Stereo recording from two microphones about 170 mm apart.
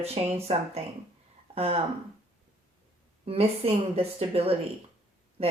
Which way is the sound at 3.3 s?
35° right (ahead or behind).